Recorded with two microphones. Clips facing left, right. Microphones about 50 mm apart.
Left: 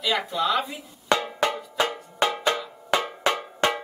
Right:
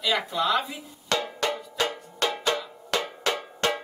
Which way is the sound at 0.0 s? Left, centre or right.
Centre.